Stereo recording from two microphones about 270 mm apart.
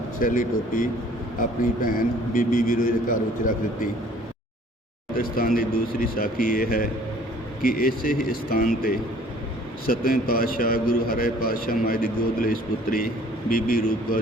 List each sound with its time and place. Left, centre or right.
0.2 s a man's voice: left
5.1 s a man's voice: left